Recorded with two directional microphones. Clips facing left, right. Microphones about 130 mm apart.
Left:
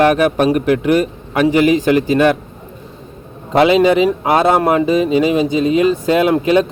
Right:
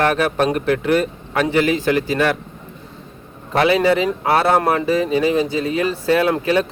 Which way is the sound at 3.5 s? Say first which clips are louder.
Left 5 dB; 20° left (ahead or behind).